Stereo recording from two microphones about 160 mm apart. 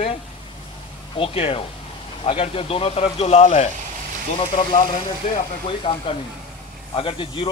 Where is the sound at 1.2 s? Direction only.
35° left (ahead or behind).